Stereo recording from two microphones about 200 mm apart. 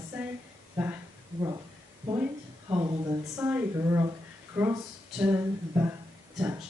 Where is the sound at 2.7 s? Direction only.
20° right (ahead or behind).